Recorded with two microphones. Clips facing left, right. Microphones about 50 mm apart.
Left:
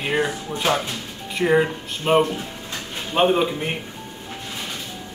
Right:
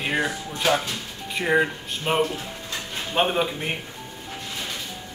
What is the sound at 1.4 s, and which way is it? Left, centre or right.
Speech, centre.